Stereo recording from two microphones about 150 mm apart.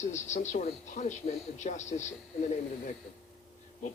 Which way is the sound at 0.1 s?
50° left (ahead or behind).